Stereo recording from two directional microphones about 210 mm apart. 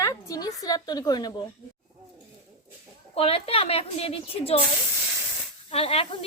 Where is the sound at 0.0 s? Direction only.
15° left (ahead or behind).